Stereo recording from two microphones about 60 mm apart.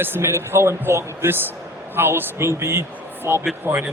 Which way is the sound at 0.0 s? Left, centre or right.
Right.